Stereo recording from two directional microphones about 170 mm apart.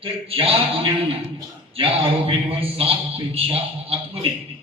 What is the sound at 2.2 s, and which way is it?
A man's voice, 35° right (ahead or behind).